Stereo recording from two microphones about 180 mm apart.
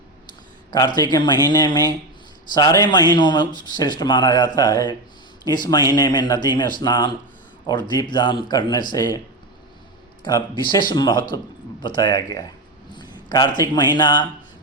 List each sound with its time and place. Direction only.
1.1 s speech: 25° left (ahead or behind)
10.2 s speech: 25° left (ahead or behind)
12.9 s a sound: 25° left (ahead or behind)
13.6 s speech: 25° left (ahead or behind)